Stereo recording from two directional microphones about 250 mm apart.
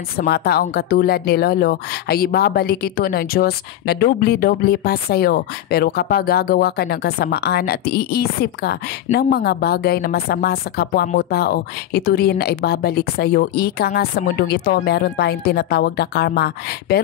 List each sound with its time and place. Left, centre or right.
0.2 s speech: left